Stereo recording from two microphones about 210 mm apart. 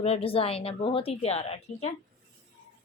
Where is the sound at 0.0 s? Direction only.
30° left (ahead or behind).